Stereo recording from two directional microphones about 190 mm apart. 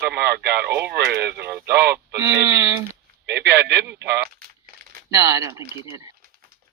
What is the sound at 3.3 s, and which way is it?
Speech, 60° right (ahead or behind).